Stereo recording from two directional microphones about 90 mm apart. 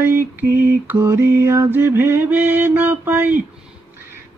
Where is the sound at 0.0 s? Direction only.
25° right (ahead or behind).